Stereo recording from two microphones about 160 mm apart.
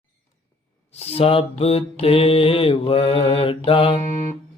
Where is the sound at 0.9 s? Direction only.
40° left (ahead or behind).